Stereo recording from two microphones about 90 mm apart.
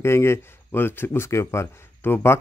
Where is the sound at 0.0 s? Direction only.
30° left (ahead or behind).